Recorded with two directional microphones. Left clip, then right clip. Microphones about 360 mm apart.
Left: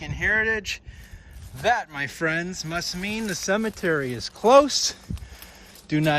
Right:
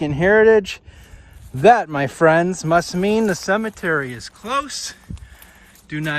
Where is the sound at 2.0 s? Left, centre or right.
Centre.